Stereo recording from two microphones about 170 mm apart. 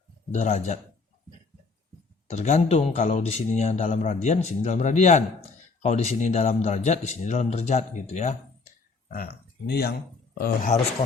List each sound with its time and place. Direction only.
0.3 s a man's voice: 45° left (ahead or behind)
2.2 s a man's voice: 40° left (ahead or behind)
9.0 s speech: 65° left (ahead or behind)